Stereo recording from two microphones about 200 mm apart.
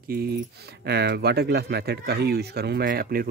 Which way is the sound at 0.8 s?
55° right (ahead or behind).